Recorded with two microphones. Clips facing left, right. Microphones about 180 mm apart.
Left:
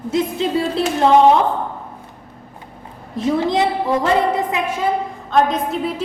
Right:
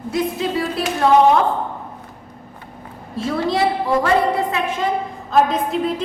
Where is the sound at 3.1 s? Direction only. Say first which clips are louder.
Left 3 dB; 15° left (ahead or behind).